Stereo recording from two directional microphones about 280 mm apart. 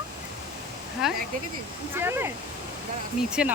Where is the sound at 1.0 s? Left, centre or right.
Centre.